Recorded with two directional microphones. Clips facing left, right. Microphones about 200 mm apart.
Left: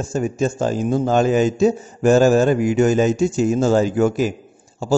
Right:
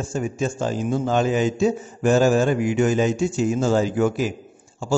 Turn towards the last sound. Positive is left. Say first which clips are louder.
# left 4 dB
turn(degrees=40)  # may be behind; listen again after turning